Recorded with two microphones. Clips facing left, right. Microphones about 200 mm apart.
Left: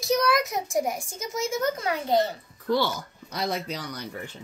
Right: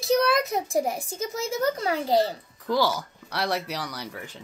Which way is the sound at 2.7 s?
80° right.